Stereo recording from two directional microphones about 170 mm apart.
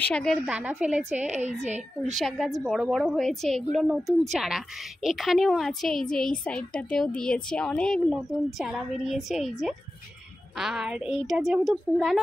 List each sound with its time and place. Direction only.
0.0 s a woman's voice: 5° left (ahead or behind)
0.6 s a woman's voice: 10° right (ahead or behind)
1.6 s a woman's voice: 45° right (ahead or behind)
2.1 s a woman's voice: centre (ahead or behind)